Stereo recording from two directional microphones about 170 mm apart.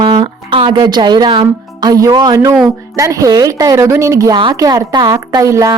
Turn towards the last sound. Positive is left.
turn(degrees=-20)  # may be behind; listen again after turning